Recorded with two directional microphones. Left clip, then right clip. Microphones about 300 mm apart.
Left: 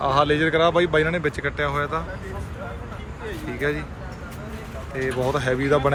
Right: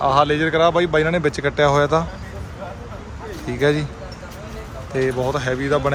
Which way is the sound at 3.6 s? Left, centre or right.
Centre.